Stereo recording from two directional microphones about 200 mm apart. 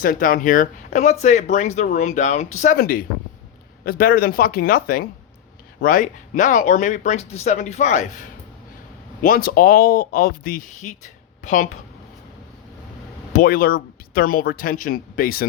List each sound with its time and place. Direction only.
0.0 s speech: 45° left (ahead or behind)
9.2 s speech: 45° left (ahead or behind)
13.3 s speech: 45° left (ahead or behind)